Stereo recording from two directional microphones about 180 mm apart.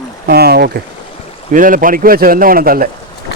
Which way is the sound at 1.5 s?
50° right (ahead or behind).